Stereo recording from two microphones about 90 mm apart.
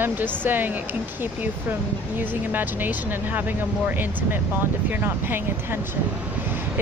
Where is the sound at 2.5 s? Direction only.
20° right (ahead or behind).